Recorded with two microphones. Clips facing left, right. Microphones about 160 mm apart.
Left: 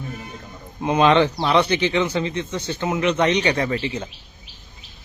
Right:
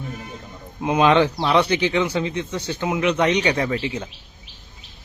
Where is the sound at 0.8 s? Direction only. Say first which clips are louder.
Even; 5° right (ahead or behind).